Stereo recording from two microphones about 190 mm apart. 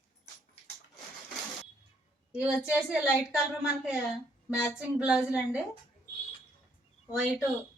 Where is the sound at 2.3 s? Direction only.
5° right (ahead or behind).